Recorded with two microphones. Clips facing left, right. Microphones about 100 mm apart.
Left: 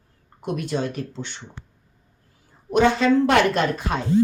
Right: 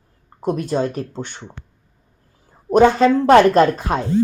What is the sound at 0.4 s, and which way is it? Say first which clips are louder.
Speech: right 5 dB; 35° right (ahead or behind).